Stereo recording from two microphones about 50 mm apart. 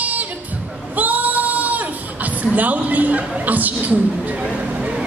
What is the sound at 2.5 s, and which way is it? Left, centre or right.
A man's voice, right.